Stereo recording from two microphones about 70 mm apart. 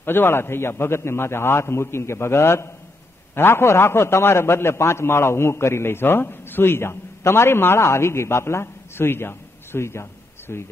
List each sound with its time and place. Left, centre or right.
0.0 s a man's voice: left